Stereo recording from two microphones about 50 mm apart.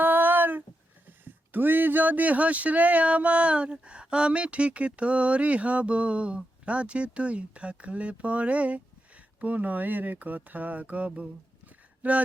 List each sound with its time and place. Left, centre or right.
0.0 s a sound: right
1.0 s speech: right
12.0 s mantra: right